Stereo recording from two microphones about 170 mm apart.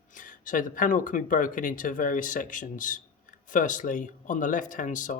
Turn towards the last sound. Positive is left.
turn(degrees=50)  # may be behind; listen again after turning